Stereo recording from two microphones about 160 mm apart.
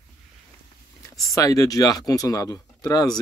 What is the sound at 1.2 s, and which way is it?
Speech, 20° left (ahead or behind).